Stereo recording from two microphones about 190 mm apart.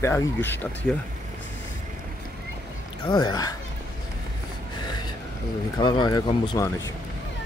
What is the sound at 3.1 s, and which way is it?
Speech, 20° left (ahead or behind).